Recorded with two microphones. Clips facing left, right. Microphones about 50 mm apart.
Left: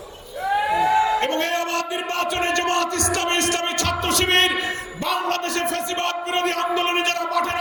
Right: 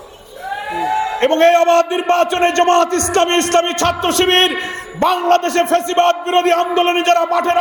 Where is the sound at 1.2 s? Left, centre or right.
Right.